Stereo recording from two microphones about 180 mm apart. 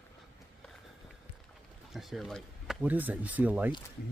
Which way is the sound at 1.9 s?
Centre (ahead or behind).